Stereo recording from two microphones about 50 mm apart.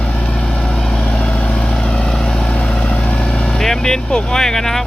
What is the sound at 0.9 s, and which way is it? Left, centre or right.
Vehicle, centre.